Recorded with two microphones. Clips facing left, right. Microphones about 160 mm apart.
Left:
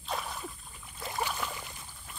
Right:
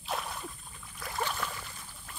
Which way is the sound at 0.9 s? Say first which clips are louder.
Left 1 dB; 20° left (ahead or behind).